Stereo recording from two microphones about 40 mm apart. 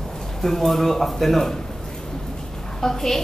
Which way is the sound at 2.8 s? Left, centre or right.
Centre.